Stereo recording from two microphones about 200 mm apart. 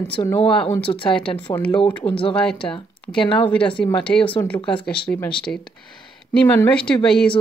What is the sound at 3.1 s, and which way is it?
Speech, 25° left (ahead or behind).